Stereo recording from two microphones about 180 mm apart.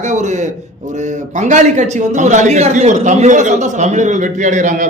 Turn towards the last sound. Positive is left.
turn(degrees=-45)  # may be behind; listen again after turning